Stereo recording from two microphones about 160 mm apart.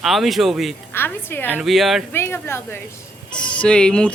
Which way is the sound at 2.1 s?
15° left (ahead or behind).